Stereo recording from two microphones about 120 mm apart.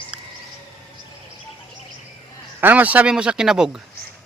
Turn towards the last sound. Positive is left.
turn(degrees=-5)  # may be behind; listen again after turning